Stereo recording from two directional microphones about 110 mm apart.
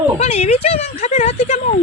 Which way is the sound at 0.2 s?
85° left.